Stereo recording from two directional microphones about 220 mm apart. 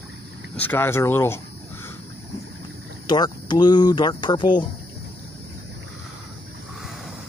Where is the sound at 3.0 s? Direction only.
20° left (ahead or behind).